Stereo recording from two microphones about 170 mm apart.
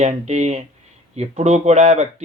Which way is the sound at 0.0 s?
45° right (ahead or behind).